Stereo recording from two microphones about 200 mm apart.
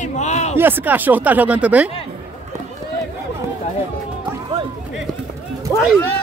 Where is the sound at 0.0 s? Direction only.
35° left (ahead or behind).